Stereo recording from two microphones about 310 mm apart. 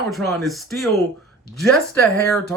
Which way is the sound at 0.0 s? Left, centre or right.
Centre.